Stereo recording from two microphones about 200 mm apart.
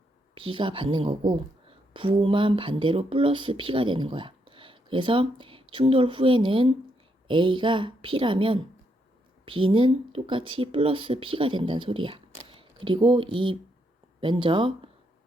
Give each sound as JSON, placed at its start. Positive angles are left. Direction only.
{"t": 0.3, "sound": "speech", "side_deg": -25}